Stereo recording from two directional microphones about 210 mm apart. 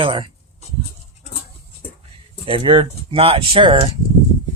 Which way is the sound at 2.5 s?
25° right (ahead or behind).